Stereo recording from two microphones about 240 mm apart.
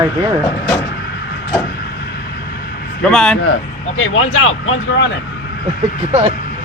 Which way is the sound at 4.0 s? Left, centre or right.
Left.